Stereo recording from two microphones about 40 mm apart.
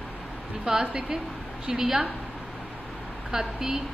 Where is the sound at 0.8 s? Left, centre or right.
Right.